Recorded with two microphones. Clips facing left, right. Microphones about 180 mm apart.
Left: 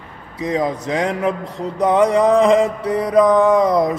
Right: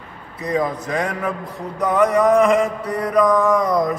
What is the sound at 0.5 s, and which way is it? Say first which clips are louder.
Music: left 1 dB; 20° left (ahead or behind).